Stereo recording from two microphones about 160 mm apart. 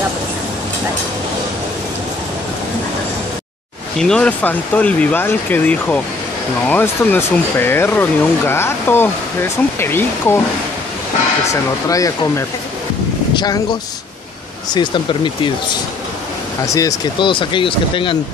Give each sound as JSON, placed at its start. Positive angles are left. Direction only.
{"t": 4.0, "sound": "speech", "side_deg": 5}
{"t": 11.9, "sound": "speech", "side_deg": 20}